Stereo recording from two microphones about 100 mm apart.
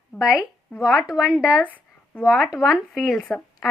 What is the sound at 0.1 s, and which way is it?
Speech, 5° left (ahead or behind).